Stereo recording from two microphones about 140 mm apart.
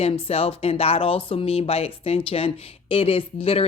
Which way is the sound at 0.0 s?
45° left (ahead or behind).